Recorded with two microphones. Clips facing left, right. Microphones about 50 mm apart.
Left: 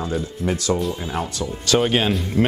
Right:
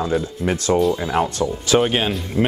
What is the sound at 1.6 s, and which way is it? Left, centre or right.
Speech, centre.